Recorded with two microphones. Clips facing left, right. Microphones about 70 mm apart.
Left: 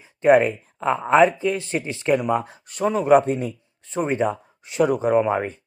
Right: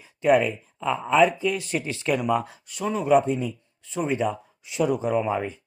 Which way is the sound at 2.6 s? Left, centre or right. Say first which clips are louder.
Left 6 dB; left.